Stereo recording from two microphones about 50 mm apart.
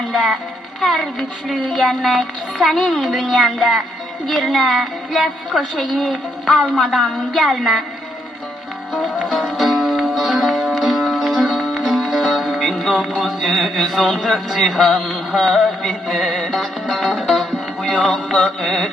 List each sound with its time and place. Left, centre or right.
0.1 s a woman's voice: centre
9.3 s music: centre
17.8 s music: left
18.3 s a woman's voice: centre